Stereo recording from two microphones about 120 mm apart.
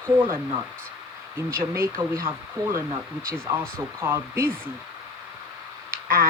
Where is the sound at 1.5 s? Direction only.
20° right (ahead or behind).